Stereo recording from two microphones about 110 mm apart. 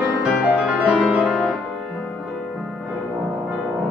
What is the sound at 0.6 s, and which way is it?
Music, 10° right (ahead or behind).